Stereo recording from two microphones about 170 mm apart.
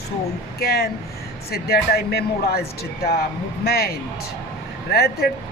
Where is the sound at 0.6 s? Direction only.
70° left (ahead or behind).